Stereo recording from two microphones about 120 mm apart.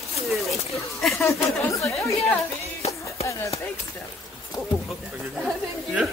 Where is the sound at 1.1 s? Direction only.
20° left (ahead or behind).